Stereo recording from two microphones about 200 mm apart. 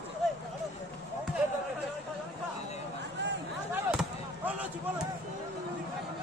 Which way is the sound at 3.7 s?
5° right (ahead or behind).